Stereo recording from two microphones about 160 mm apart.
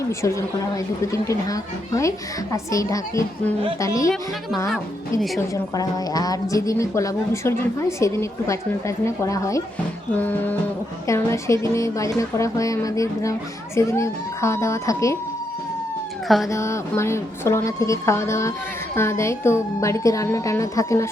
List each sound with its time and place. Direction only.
0.1 s a woman's voice: 20° left (ahead or behind)
5.4 s a woman's voice: 25° left (ahead or behind)
16.5 s a woman's voice: 20° left (ahead or behind)